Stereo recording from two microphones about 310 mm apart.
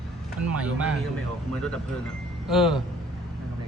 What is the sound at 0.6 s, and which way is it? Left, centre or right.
Speech, centre.